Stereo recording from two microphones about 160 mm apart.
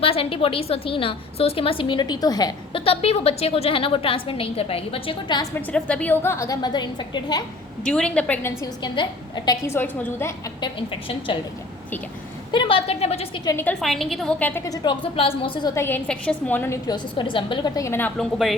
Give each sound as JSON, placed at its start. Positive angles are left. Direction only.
{"t": 0.0, "sound": "a woman's voice", "side_deg": 35}
{"t": 2.8, "sound": "a woman's voice", "side_deg": 35}
{"t": 5.7, "sound": "a woman's voice", "side_deg": 10}
{"t": 7.9, "sound": "a woman's voice", "side_deg": 5}
{"t": 8.6, "sound": "a woman's voice", "side_deg": 30}
{"t": 9.6, "sound": "a woman's voice", "side_deg": 10}
{"t": 10.6, "sound": "a woman's voice", "side_deg": 30}
{"t": 12.5, "sound": "a woman's voice", "side_deg": 30}
{"t": 13.4, "sound": "a woman's voice", "side_deg": 20}
{"t": 13.8, "sound": "a woman's voice", "side_deg": 0}
{"t": 15.7, "sound": "a woman's voice", "side_deg": 15}
{"t": 16.8, "sound": "a woman's voice", "side_deg": 25}
{"t": 18.2, "sound": "speech", "side_deg": 0}